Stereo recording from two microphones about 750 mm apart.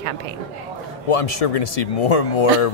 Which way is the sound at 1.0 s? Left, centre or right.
Left.